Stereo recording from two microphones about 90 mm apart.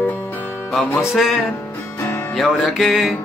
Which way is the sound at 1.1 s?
Centre (ahead or behind).